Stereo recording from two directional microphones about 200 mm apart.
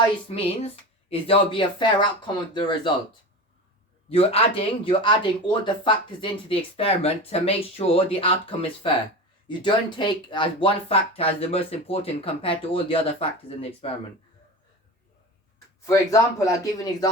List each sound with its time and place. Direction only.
1.1 s speech: 25° left (ahead or behind)
15.5 s speech: 15° left (ahead or behind)